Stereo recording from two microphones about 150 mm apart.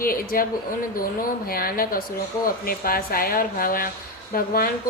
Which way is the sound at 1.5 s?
75° left (ahead or behind).